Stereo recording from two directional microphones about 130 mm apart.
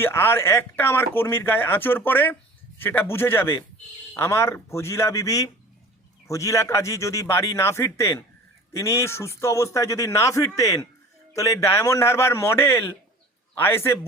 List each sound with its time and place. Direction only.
0.0 s a man's voice: 15° left (ahead or behind)